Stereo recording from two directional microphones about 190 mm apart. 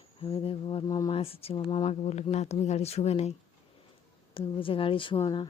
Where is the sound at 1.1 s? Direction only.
30° left (ahead or behind).